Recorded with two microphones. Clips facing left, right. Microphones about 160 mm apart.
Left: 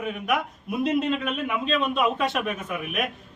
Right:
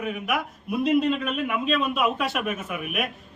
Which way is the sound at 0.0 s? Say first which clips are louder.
Left 1 dB; centre (ahead or behind).